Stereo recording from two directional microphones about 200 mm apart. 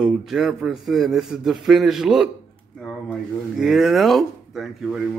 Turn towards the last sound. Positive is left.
turn(degrees=0)  # may be behind; listen again after turning